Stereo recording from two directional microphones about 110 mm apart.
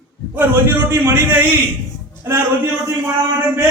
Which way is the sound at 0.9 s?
20° right (ahead or behind).